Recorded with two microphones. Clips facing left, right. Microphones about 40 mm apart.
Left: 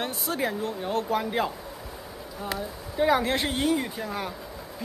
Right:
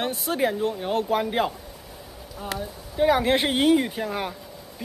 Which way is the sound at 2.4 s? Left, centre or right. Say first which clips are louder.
Right 1 dB; centre.